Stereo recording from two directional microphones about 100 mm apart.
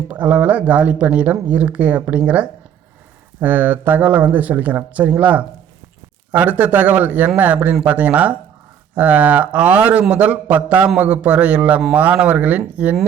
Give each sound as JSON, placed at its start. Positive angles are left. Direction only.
{"t": 0.1, "sound": "a man's voice", "side_deg": -15}